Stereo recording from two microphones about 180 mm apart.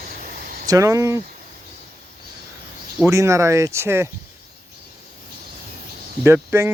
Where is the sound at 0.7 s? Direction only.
20° right (ahead or behind).